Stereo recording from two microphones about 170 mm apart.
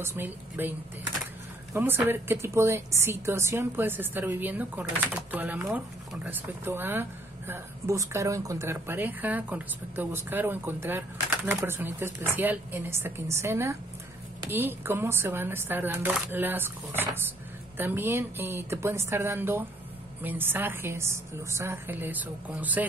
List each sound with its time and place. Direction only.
0.0 s speech: 15° right (ahead or behind)